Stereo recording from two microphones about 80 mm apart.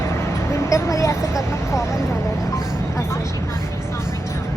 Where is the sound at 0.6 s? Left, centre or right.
Left.